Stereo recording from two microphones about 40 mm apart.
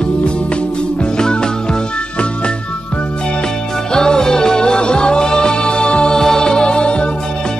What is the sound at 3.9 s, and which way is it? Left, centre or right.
Music, centre.